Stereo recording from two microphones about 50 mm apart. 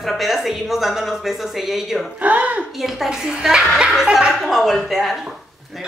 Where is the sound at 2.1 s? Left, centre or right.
Right.